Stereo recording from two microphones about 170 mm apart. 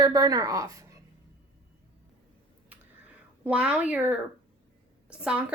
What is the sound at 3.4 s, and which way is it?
Speech, 5° right (ahead or behind).